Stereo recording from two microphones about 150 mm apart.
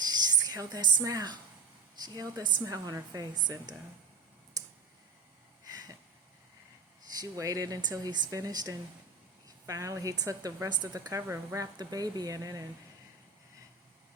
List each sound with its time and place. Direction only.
0.0 s a woman's voice: 25° right (ahead or behind)
4.6 s clicking: 25° right (ahead or behind)
5.6 s a sound: 25° right (ahead or behind)
7.2 s a woman's voice: 20° right (ahead or behind)